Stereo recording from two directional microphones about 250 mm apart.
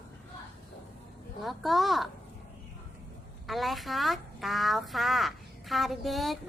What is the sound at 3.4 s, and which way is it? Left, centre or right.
A woman's voice, centre.